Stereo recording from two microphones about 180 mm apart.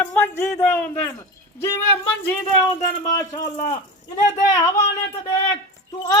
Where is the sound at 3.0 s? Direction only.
40° left (ahead or behind).